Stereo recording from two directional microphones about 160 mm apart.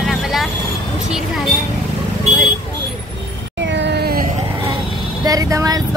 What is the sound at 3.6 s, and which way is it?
Cat, 90° right.